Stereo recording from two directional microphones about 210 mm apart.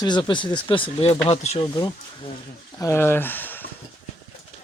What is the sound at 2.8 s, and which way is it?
Speech, 10° left (ahead or behind).